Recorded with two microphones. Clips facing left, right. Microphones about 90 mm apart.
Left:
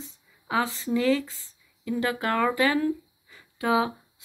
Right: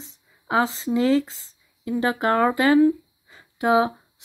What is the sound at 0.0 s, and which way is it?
Speech, 25° right (ahead or behind).